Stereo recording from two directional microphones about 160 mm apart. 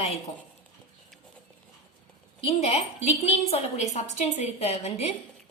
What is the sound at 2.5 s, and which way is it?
A woman's voice, 40° left (ahead or behind).